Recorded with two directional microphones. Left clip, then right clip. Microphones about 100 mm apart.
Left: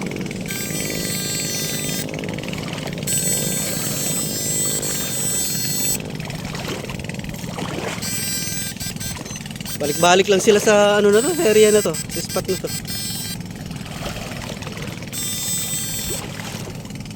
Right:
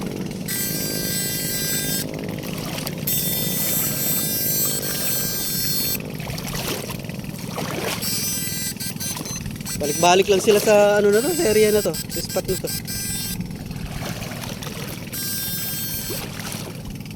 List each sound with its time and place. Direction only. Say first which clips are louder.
1.5 s a sound: left 1 dB; 70° right (ahead or behind)
3.2 s mechanisms: left 3 dB; centre (ahead or behind)
10.0 s speech: left 1 dB; 20° left (ahead or behind)
11.2 s speech: left 2 dB; 35° left (ahead or behind)
11.4 s speech: left 5 dB; 20° left (ahead or behind)